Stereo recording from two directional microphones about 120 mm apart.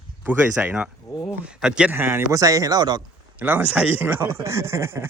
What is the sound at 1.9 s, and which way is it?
A man's voice, 20° right (ahead or behind).